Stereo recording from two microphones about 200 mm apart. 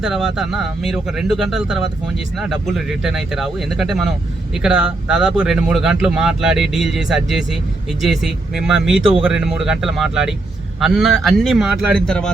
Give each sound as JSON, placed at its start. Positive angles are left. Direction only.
{"t": 0.0, "sound": "speech", "side_deg": 0}